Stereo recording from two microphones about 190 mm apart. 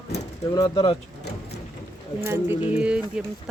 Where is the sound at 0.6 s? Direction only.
25° left (ahead or behind).